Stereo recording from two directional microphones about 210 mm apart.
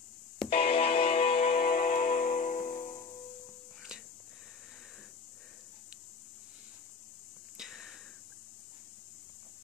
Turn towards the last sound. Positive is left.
turn(degrees=0)  # may be behind; listen again after turning